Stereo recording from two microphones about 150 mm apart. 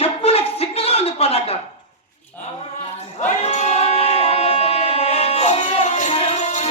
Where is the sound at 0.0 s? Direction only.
40° left (ahead or behind).